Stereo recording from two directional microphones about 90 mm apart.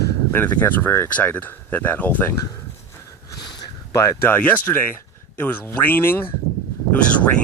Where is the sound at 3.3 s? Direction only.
55° left (ahead or behind).